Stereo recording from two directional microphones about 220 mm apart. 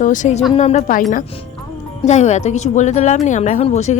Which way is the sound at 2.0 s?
30° left (ahead or behind).